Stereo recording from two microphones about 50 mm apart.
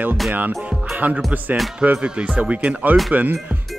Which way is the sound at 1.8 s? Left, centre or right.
Right.